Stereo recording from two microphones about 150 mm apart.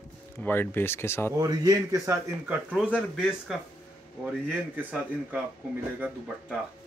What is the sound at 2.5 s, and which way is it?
Speech, 10° right (ahead or behind).